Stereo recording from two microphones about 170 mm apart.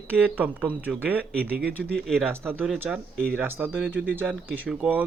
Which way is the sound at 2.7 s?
10° right (ahead or behind).